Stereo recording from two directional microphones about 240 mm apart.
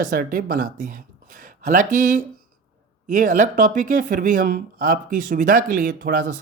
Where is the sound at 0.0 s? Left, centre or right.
Right.